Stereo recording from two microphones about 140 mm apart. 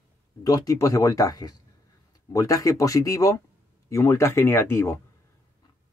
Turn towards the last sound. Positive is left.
turn(degrees=20)  # may be behind; listen again after turning